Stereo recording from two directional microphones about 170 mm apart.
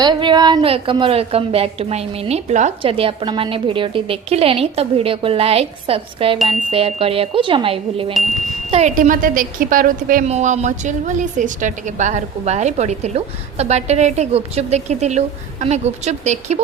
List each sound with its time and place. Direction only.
0.0 s a woman's voice: 25° right (ahead or behind); by 2.7 s 45° right (ahead or behind)
2.8 s a woman's voice: 30° right (ahead or behind)
9.0 s a woman's voice: 55° right (ahead or behind)
10.2 s a woman's voice: 45° right (ahead or behind)